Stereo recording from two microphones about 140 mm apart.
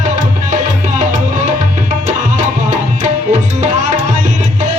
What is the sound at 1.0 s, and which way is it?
Music, 60° right (ahead or behind).